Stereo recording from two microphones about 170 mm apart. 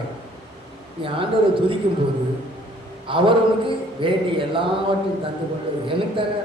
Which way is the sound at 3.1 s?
30° right (ahead or behind).